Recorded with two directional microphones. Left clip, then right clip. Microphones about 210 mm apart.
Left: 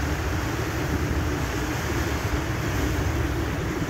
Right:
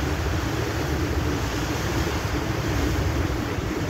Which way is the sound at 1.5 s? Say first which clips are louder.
Right 1 dB; 50° left (ahead or behind).